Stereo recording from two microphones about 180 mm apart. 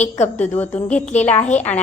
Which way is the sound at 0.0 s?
40° left (ahead or behind).